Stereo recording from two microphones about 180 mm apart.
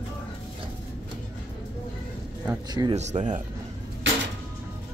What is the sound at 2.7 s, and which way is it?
Speech, 25° right (ahead or behind).